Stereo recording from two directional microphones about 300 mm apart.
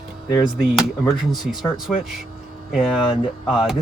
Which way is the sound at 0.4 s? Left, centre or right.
Centre.